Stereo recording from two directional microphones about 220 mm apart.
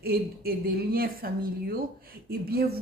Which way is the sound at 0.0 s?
45° right (ahead or behind).